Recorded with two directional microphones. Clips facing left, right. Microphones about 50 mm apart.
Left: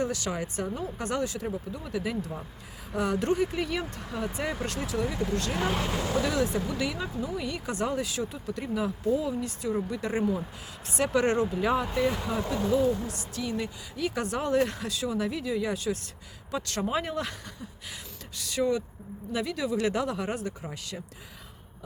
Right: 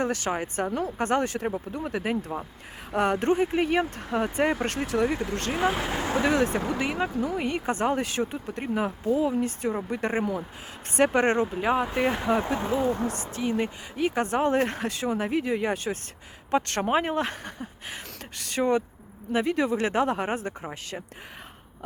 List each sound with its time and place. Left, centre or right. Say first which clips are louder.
0.0 s speech: right 3 dB; right
5.2 s speech: even; right
5.5 s speech: right 6 dB; centre
5.9 s speech: right 3 dB; right
11.9 s speech: right 3 dB; right